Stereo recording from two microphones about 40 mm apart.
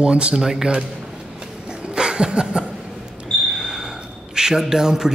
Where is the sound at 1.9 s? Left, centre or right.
Centre.